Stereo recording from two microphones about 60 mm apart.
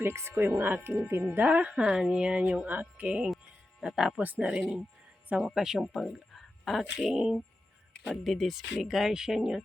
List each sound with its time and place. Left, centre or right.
0.0 s speech: right
3.2 s speech: centre
4.2 s speech: right
5.4 s speech: centre
8.1 s speech: centre